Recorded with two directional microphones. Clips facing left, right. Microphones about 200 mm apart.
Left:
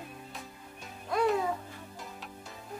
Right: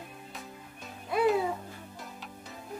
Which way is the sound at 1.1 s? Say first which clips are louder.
Right 2 dB; 5° right (ahead or behind).